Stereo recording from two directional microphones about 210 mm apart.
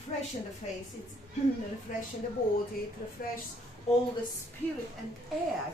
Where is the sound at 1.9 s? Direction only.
40° left (ahead or behind).